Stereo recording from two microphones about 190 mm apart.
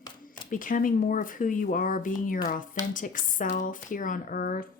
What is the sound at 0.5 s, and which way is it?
A woman's voice, 45° left (ahead or behind).